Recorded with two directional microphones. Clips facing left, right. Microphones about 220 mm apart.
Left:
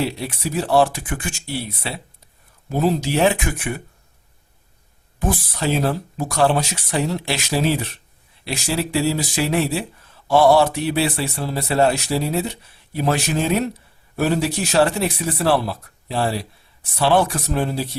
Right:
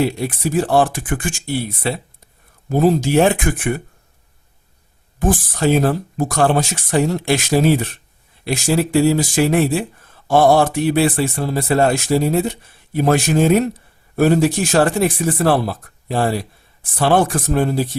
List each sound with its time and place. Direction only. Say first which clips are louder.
0.0 s a man's voice: right 5 dB; 50° right (ahead or behind)
5.2 s a man's voice: right 5 dB; 50° right (ahead or behind)